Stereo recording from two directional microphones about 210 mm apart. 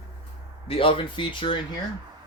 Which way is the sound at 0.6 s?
25° left (ahead or behind).